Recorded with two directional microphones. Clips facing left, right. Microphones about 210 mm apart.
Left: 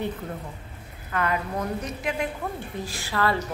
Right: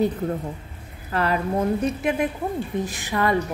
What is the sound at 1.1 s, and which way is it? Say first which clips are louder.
A woman's voice: right 4 dB; 30° right (ahead or behind).